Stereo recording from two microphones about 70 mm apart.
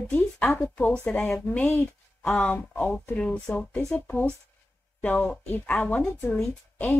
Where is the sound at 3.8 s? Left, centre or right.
Left.